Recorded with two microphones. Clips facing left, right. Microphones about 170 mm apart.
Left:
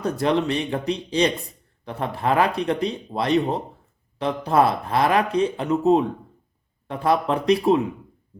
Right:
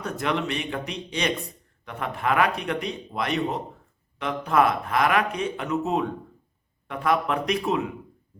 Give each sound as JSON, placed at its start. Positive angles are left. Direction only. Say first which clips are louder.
{"t": 0.0, "sound": "speech", "louder": "left 6 dB", "side_deg": 35}